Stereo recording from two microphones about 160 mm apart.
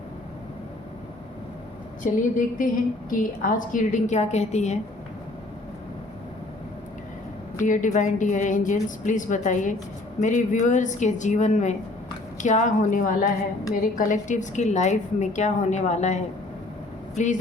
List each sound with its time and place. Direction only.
2.0 s a woman's voice: 55° left (ahead or behind)
7.6 s a woman's voice: 50° left (ahead or behind)